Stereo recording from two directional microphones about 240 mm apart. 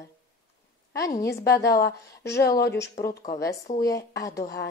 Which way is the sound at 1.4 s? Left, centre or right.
Left.